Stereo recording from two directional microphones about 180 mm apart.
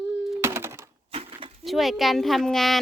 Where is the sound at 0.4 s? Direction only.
15° right (ahead or behind).